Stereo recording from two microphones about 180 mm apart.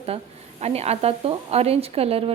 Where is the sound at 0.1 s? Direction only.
35° right (ahead or behind).